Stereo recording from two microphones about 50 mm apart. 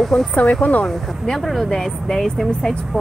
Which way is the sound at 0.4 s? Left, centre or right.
Left.